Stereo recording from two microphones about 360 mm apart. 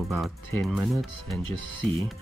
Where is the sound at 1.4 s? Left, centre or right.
Right.